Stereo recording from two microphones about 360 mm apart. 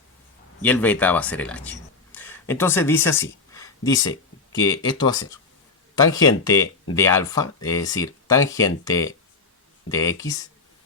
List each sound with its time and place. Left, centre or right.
0.6 s speech: centre
2.1 s a sound: centre
4.5 s speech: centre